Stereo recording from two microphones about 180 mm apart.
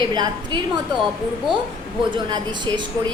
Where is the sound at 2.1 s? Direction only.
25° right (ahead or behind).